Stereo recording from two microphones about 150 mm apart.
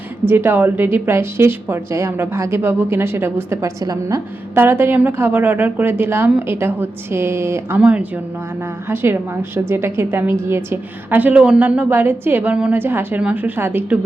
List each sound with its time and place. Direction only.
0.3 s a woman's voice: 15° right (ahead or behind)